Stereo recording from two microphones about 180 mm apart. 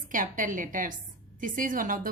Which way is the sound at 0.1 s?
45° right (ahead or behind).